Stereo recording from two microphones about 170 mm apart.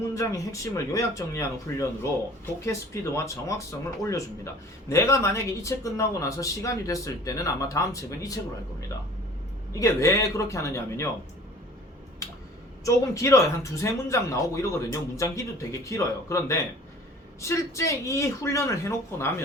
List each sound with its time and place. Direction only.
0.1 s a man's voice: 20° left (ahead or behind)
9.8 s speech: 20° left (ahead or behind)
12.2 s a sound: 20° left (ahead or behind)
12.8 s a man's voice: 20° left (ahead or behind)